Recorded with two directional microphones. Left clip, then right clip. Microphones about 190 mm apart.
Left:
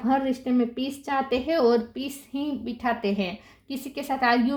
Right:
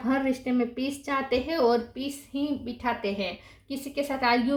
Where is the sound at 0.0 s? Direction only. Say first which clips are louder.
Left 3 dB; 35° left (ahead or behind).